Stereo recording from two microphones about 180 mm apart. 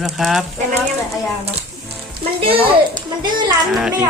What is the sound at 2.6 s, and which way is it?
Speech, 25° right (ahead or behind).